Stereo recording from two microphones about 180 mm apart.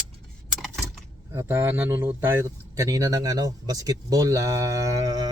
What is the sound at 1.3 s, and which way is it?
Speech, 15° right (ahead or behind).